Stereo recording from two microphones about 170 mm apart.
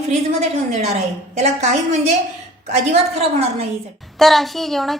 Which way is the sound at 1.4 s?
40° right (ahead or behind).